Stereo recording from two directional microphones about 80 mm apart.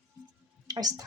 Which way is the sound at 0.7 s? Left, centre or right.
Right.